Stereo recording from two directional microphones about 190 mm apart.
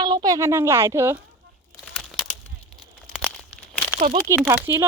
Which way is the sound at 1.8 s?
Centre (ahead or behind).